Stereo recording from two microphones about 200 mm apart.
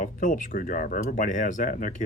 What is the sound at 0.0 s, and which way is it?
Speech, 40° left (ahead or behind).